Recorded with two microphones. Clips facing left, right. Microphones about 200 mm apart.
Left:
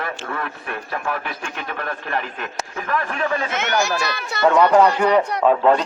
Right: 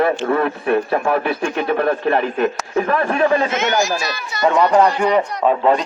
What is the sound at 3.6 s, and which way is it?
Speech, 65° left (ahead or behind).